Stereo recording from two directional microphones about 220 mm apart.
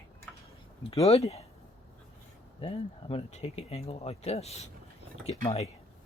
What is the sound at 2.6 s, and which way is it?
Speech, 25° left (ahead or behind).